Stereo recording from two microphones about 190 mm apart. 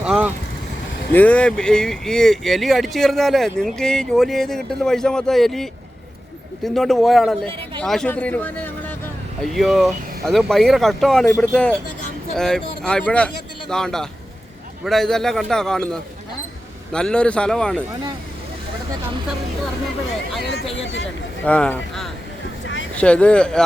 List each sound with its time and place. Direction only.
0.0 s vehicle: 5° right (ahead or behind)
1.1 s speech: 10° left (ahead or behind)
6.7 s speech: centre (ahead or behind)
9.4 s speech: centre (ahead or behind)
20.7 s speech: 80° left
21.4 s speech: 5° left (ahead or behind)
22.6 s vehicle: 80° left
23.0 s speech: 5° left (ahead or behind)